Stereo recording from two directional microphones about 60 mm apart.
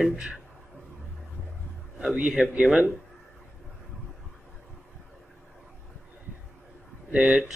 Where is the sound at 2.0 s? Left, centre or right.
Centre.